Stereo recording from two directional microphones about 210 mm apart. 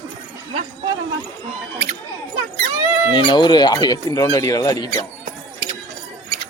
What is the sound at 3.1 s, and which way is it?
Speech, 20° left (ahead or behind).